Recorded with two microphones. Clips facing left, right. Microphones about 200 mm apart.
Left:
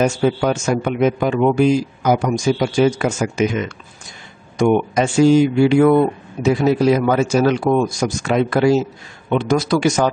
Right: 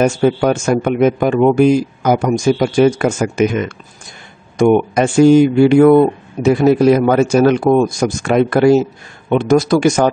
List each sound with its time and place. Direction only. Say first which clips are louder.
0.0 s speech: right 4 dB; 50° right (ahead or behind)